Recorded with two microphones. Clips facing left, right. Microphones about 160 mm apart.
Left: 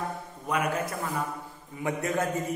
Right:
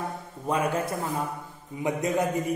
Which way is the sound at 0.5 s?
30° right (ahead or behind).